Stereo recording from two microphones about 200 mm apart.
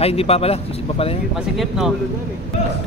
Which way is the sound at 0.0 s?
30° left (ahead or behind).